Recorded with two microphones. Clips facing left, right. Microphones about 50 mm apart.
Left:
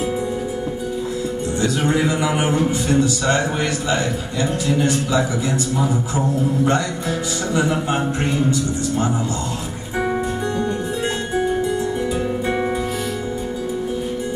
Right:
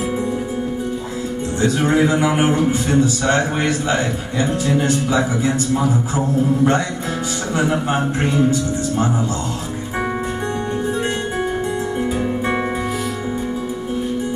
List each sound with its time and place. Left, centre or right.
1.6 s a man's voice: right